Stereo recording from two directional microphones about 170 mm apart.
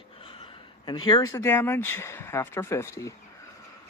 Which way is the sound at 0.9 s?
25° left (ahead or behind).